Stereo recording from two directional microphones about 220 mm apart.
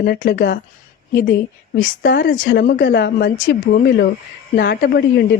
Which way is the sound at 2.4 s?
40° left (ahead or behind).